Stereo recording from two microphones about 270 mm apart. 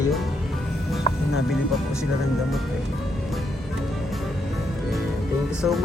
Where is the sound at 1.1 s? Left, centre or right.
Left.